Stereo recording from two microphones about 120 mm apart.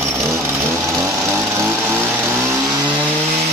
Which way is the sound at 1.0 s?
20° right (ahead or behind).